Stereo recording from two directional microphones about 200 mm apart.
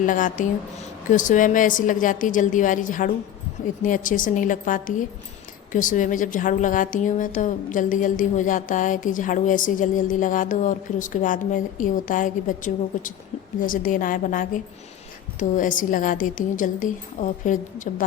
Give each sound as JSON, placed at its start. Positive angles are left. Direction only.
{"t": 0.0, "sound": "a woman's voice", "side_deg": 40}